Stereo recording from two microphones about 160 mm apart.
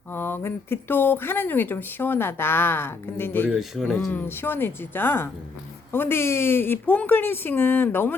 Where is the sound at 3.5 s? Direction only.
Centre (ahead or behind).